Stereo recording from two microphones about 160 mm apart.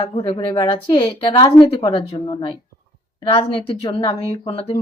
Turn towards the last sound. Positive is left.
turn(degrees=35)  # may be behind; listen again after turning